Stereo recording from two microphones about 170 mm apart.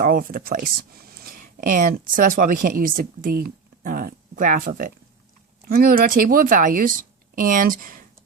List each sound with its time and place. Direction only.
0.0 s speech: 55° right (ahead or behind)